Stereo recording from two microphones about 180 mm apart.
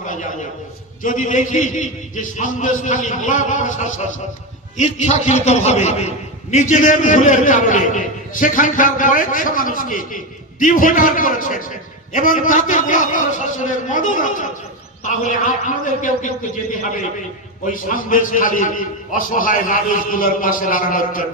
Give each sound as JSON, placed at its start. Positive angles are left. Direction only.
{"t": 0.0, "sound": "a sound", "side_deg": 45}
{"t": 1.0, "sound": "a man's voice", "side_deg": 45}
{"t": 17.7, "sound": "a man's voice", "side_deg": 45}